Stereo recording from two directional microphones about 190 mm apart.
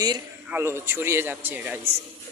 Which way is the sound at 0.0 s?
15° right (ahead or behind).